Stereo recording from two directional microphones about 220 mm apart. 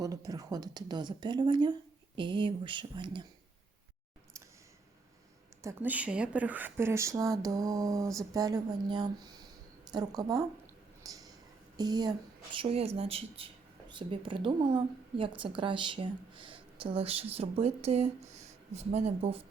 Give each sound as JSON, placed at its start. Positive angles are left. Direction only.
{"t": 0.0, "sound": "a woman's voice", "side_deg": -15}
{"t": 5.6, "sound": "a woman's voice", "side_deg": -5}
{"t": 11.0, "sound": "a sound", "side_deg": -15}
{"t": 11.8, "sound": "a woman's voice", "side_deg": -20}